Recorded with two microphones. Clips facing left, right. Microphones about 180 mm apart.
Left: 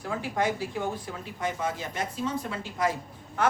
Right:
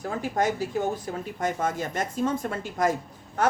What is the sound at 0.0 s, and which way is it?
A woman's voice, 45° right (ahead or behind).